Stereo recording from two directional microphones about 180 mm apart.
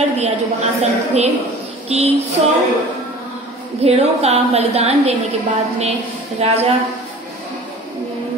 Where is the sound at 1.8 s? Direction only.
35° right (ahead or behind).